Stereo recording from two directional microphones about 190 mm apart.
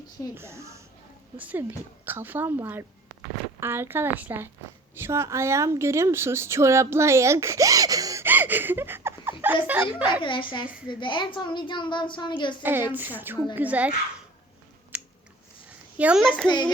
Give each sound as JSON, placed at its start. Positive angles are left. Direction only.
{"t": 0.3, "sound": "speech", "side_deg": -15}
{"t": 10.2, "sound": "a woman's voice", "side_deg": 25}
{"t": 12.6, "sound": "speech", "side_deg": -10}
{"t": 14.9, "sound": "scissors", "side_deg": -5}
{"t": 16.0, "sound": "a child's voice", "side_deg": -5}
{"t": 16.5, "sound": "a woman's voice", "side_deg": 25}